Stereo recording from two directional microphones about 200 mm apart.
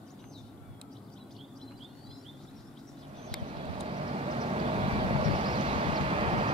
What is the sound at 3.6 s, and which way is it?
Vehicle, 30° right (ahead or behind).